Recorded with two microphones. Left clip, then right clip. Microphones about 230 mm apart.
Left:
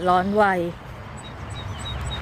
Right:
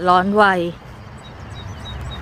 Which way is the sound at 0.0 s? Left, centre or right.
Centre.